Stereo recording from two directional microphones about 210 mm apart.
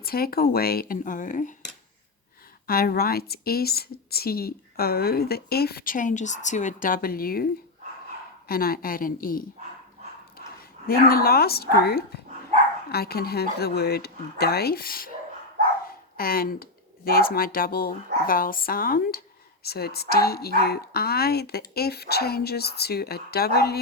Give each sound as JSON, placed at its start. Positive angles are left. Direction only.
{"t": 0.0, "sound": "speech", "side_deg": 45}
{"t": 2.6, "sound": "speech", "side_deg": 45}
{"t": 8.4, "sound": "speech", "side_deg": 45}
{"t": 10.8, "sound": "speech", "side_deg": 45}
{"t": 15.8, "sound": "dog", "side_deg": 45}
{"t": 17.1, "sound": "speech", "side_deg": 45}